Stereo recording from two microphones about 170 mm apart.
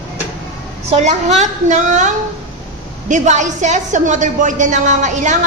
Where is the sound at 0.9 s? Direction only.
40° right (ahead or behind).